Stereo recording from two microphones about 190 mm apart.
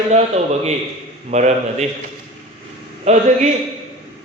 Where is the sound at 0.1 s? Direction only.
35° right (ahead or behind).